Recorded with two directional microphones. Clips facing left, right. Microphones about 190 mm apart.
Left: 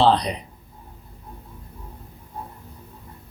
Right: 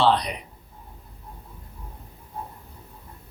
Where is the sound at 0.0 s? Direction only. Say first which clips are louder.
Left 3 dB; 35° left (ahead or behind).